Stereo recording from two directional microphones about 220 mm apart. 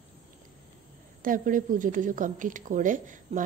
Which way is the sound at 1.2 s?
40° right (ahead or behind).